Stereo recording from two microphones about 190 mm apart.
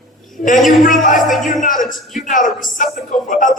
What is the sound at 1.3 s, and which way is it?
Speech, centre (ahead or behind).